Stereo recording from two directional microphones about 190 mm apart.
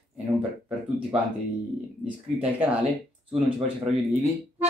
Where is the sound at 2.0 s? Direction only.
10° right (ahead or behind).